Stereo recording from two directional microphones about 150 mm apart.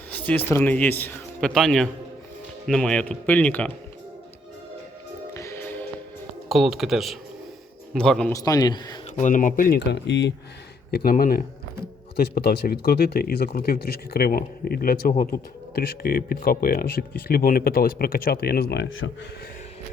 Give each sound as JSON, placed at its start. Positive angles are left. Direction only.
{"t": 0.1, "sound": "speech", "side_deg": 10}
{"t": 5.3, "sound": "music", "side_deg": 20}
{"t": 6.5, "sound": "speech", "side_deg": 0}
{"t": 8.3, "sound": "a man's voice", "side_deg": 25}
{"t": 9.1, "sound": "speech", "side_deg": 55}
{"t": 10.9, "sound": "speech", "side_deg": 75}
{"t": 12.1, "sound": "speech", "side_deg": 90}